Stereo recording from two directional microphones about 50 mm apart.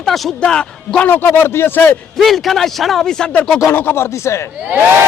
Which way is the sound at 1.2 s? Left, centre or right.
Left.